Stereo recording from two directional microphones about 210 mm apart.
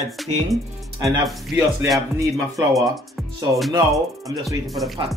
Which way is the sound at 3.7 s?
15° right (ahead or behind).